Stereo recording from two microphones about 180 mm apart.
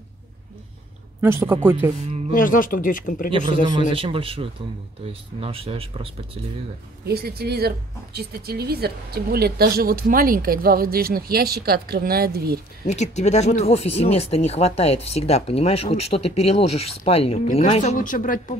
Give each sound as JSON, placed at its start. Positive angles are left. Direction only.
{"t": 1.2, "sound": "speech", "side_deg": -15}
{"t": 2.3, "sound": "speech", "side_deg": 50}
{"t": 3.9, "sound": "speech", "side_deg": -30}
{"t": 7.1, "sound": "a woman's voice", "side_deg": -60}
{"t": 12.8, "sound": "speech", "side_deg": 40}